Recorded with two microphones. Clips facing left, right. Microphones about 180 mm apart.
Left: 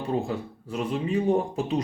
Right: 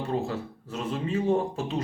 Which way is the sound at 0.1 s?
15° left (ahead or behind).